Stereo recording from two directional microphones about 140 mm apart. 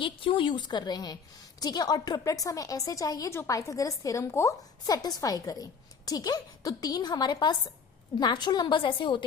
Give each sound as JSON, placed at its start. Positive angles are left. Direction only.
{"t": 0.0, "sound": "a woman's voice", "side_deg": 35}